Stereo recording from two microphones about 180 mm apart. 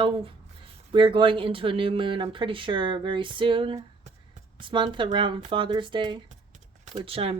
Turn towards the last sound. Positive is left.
turn(degrees=-30)  # may be behind; listen again after turning